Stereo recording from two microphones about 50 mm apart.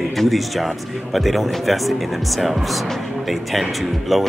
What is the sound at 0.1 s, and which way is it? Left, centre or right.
Speech, centre.